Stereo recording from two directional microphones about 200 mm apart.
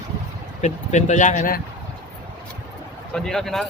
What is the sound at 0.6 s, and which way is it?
Speech, 35° left (ahead or behind).